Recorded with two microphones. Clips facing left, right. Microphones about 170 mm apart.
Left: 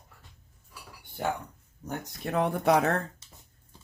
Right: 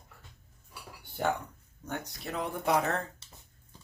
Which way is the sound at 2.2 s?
65° left (ahead or behind).